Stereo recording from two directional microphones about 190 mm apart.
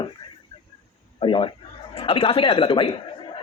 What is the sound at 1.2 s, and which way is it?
A man's voice, 25° left (ahead or behind).